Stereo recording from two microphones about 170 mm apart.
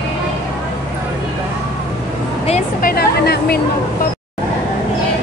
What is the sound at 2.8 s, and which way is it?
Speech, 65° left (ahead or behind).